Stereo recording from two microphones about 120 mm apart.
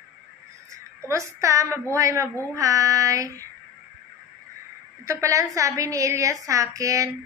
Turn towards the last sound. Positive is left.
turn(degrees=-25)  # may be behind; listen again after turning